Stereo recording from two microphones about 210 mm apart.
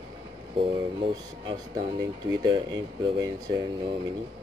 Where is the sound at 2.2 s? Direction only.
20° right (ahead or behind).